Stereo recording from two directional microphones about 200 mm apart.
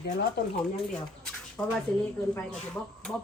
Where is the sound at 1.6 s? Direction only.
5° left (ahead or behind).